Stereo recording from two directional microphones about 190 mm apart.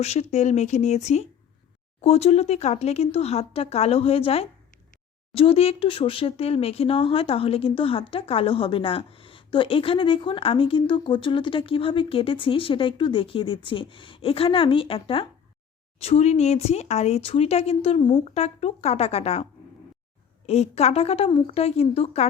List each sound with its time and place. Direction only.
0.0 s speech: 35° left (ahead or behind)
20.5 s speech: 35° left (ahead or behind)